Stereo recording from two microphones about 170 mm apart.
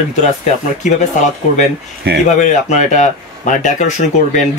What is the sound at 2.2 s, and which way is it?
Speech, 45° left (ahead or behind).